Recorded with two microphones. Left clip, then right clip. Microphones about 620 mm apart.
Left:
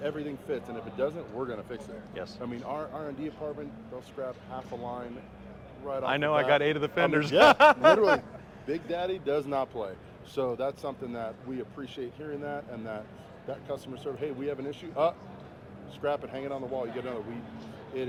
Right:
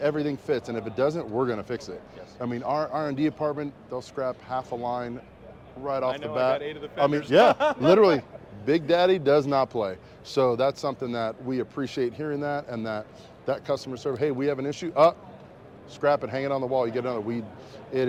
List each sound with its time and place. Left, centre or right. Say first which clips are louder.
0.0 s speech: right 8 dB; right
4.2 s speech: right 8 dB; right
6.1 s a man's voice: left 2 dB; left
7.9 s speech: right 5 dB; right
8.6 s speech: right 11 dB; right